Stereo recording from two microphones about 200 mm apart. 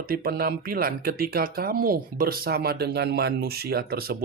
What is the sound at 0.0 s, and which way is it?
Speech, 50° right (ahead or behind).